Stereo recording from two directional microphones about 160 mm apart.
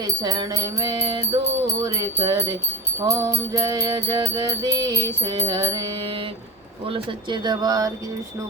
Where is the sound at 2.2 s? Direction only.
30° right (ahead or behind).